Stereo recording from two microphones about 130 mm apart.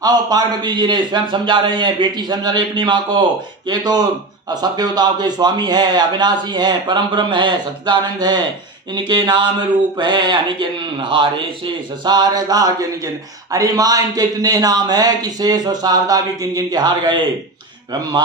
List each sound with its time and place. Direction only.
0.0 s speech: 30° right (ahead or behind)